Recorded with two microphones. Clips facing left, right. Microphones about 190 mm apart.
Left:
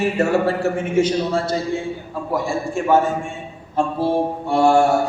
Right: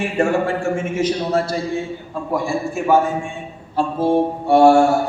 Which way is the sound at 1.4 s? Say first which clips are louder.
Right 1 dB; 25° left (ahead or behind).